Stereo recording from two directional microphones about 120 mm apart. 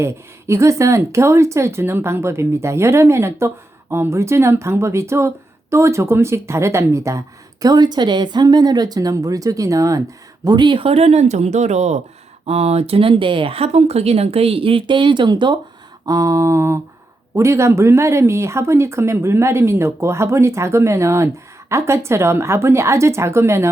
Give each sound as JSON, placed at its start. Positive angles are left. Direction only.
{"t": 0.0, "sound": "speech", "side_deg": -25}
{"t": 10.4, "sound": "speech", "side_deg": -40}
{"t": 12.5, "sound": "speech", "side_deg": -60}
{"t": 16.0, "sound": "speech", "side_deg": -30}